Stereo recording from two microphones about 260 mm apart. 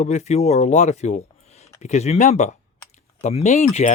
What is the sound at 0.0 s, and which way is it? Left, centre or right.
Speech, left.